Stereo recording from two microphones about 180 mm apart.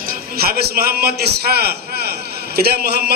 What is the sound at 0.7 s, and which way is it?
A man's voice, 60° right (ahead or behind).